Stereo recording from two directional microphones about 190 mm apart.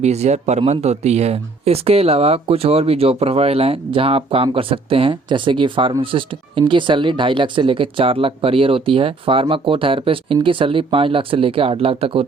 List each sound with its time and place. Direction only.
0.0 s speech: 35° right (ahead or behind)